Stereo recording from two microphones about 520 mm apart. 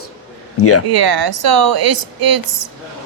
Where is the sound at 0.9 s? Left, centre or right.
Right.